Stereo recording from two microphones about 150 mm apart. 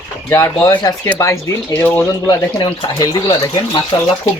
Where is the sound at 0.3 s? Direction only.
20° left (ahead or behind).